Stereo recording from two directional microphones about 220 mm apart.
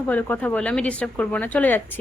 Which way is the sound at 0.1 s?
5° left (ahead or behind).